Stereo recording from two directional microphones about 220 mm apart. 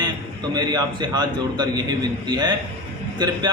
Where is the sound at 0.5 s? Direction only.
20° right (ahead or behind).